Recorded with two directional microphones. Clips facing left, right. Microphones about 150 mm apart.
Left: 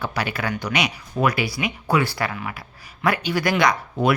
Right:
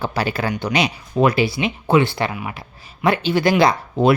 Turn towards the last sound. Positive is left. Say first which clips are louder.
# right 4 dB
turn(degrees=-30)  # may be behind; listen again after turning